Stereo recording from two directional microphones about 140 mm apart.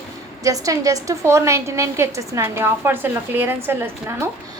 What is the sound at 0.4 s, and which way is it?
A woman's voice, 25° right (ahead or behind).